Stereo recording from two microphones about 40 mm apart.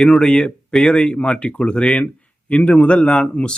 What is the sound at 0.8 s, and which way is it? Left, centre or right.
A man's voice, left.